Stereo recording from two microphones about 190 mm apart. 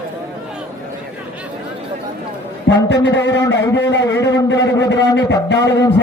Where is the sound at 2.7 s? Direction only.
75° left (ahead or behind).